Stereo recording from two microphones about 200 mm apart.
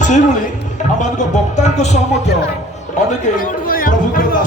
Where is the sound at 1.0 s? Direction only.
35° left (ahead or behind).